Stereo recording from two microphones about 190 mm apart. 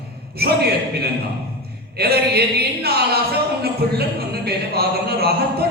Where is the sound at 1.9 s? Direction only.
55° right (ahead or behind).